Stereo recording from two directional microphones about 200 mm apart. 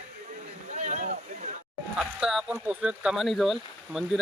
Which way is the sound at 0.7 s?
40° right (ahead or behind).